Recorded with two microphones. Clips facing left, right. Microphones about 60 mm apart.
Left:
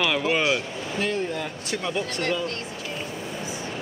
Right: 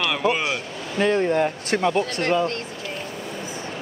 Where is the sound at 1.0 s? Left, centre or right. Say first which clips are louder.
Right 8 dB; right.